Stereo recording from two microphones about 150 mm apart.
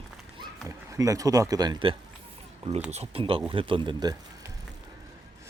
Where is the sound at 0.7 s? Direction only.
20° right (ahead or behind).